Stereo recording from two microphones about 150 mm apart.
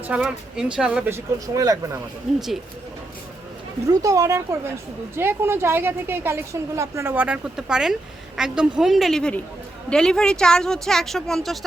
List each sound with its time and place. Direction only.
0.2 s a woman's voice: 5° right (ahead or behind)
1.5 s speech: 25° right (ahead or behind)
2.3 s a woman's voice: centre (ahead or behind)
4.0 s a woman's voice: 20° right (ahead or behind); by 11.5 s 5° left (ahead or behind)